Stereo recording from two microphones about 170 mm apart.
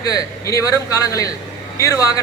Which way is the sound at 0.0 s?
20° left (ahead or behind).